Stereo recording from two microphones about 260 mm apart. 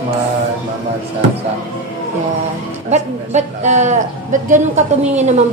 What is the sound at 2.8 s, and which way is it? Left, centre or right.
A man's voice, right.